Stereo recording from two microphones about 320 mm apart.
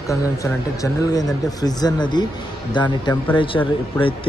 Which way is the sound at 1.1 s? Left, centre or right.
Centre.